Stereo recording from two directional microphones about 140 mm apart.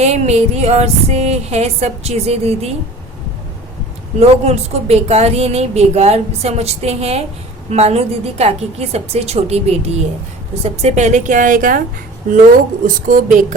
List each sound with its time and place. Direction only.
0.0 s a woman's voice: 50° right (ahead or behind)
4.2 s a woman's voice: 50° right (ahead or behind); by 13.4 s 70° right (ahead or behind)